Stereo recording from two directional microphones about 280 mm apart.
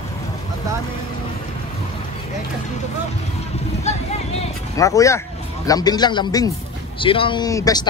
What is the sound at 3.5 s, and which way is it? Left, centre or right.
Speech, left.